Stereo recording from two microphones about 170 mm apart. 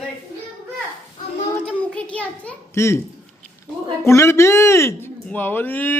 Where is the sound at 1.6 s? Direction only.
5° left (ahead or behind).